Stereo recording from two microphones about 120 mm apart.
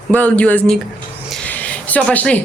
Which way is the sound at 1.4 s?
10° left (ahead or behind).